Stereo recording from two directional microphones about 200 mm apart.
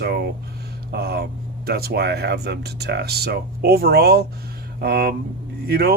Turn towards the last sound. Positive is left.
turn(degrees=-50)  # may be behind; listen again after turning